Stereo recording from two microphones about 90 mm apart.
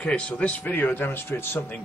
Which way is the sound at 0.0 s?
15° left (ahead or behind).